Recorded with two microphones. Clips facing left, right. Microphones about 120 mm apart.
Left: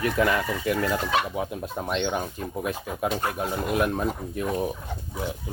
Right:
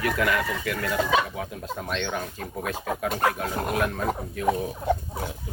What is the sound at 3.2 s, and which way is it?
Speech, 90° right.